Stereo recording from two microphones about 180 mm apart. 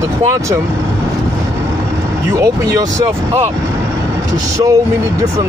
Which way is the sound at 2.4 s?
20° right (ahead or behind).